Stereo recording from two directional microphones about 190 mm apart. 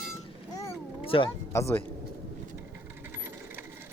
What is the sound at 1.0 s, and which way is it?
Speech, 30° left (ahead or behind).